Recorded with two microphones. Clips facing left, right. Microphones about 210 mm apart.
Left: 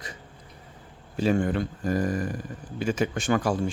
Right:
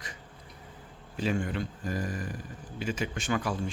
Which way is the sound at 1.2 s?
50° left (ahead or behind).